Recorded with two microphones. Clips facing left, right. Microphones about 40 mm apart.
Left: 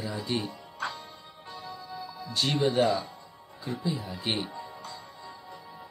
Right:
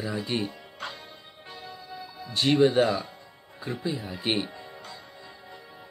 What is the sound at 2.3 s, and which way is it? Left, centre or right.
Speech, right.